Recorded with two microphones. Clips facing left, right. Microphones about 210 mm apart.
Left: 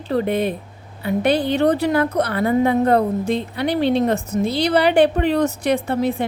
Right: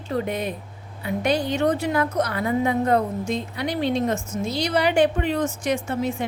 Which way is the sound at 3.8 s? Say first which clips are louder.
Left 4 dB; 70° left (ahead or behind).